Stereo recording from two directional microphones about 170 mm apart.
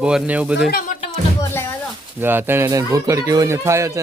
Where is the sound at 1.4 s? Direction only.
15° left (ahead or behind).